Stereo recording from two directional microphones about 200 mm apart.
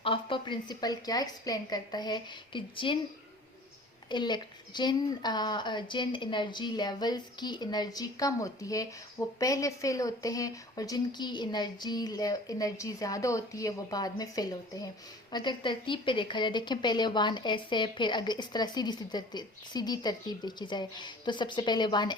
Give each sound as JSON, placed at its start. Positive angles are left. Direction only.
{"t": 0.0, "sound": "a woman's voice", "side_deg": 25}
{"t": 4.1, "sound": "a woman's voice", "side_deg": 20}